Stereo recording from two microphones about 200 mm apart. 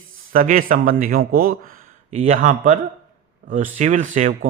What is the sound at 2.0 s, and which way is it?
A man's voice, 35° right (ahead or behind).